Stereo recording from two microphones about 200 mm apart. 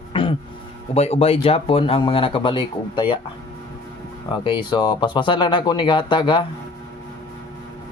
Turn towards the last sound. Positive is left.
turn(degrees=25)  # may be behind; listen again after turning